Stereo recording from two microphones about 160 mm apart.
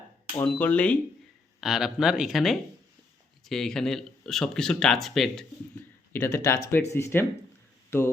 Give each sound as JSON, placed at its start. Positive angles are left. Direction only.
{"t": 0.4, "sound": "speech", "side_deg": 10}
{"t": 1.6, "sound": "speech", "side_deg": -5}
{"t": 6.1, "sound": "speech", "side_deg": 15}